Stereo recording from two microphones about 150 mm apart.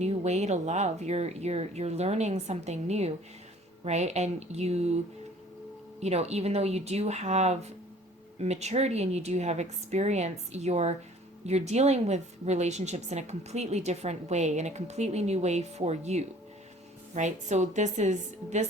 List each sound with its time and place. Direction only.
0.0 s a woman's voice: 45° right (ahead or behind)
6.0 s a woman's voice: 45° right (ahead or behind)